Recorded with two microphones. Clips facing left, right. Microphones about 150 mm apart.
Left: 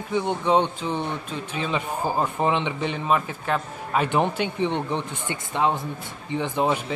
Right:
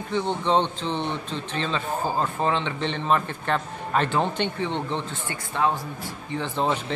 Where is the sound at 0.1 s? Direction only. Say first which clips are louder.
Left 1 dB; 10° left (ahead or behind).